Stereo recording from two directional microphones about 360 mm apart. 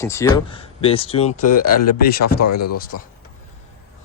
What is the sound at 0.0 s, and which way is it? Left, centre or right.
Speech, centre.